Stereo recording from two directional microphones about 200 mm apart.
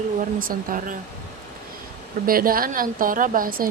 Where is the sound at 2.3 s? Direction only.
45° right (ahead or behind).